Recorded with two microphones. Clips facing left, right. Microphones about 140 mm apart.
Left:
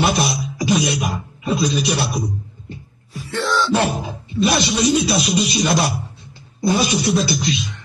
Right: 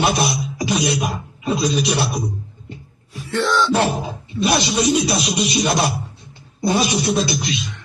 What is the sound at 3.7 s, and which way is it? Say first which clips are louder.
Speech: even; 25° right (ahead or behind).